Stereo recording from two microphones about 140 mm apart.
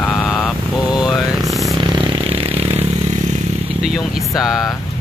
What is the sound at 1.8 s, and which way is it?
Vehicle, 35° right (ahead or behind).